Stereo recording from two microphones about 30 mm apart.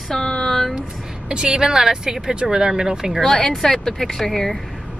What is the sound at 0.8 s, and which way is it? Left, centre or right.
A woman's voice, right.